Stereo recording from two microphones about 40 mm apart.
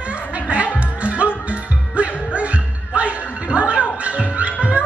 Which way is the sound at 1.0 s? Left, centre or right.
Right.